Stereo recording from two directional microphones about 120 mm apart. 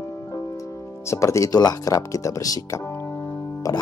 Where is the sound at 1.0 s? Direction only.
25° left (ahead or behind).